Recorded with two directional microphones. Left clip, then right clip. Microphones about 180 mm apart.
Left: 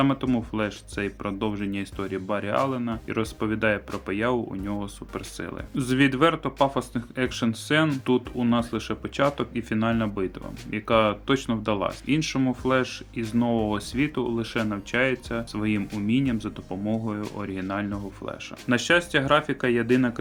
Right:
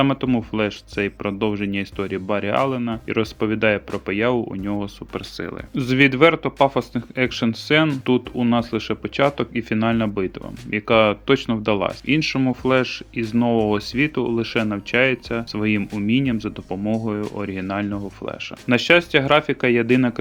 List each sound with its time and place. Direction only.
0.0 s speech: 35° right (ahead or behind)